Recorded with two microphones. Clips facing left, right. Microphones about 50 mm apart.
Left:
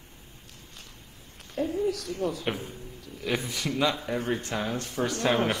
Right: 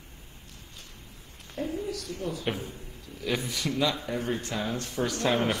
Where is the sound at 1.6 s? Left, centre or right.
Left.